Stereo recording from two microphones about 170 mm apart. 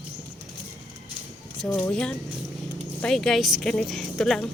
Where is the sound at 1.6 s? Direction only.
10° left (ahead or behind).